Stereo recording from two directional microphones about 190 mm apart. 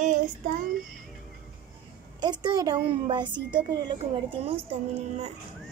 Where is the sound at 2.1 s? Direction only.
20° right (ahead or behind).